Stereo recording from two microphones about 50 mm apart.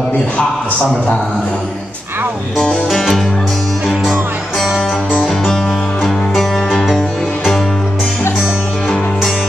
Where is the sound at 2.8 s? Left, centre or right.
Centre.